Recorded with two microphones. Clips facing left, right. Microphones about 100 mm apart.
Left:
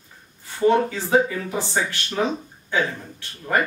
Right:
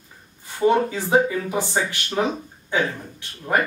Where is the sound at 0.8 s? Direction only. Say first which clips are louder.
Right 1 dB; 15° right (ahead or behind).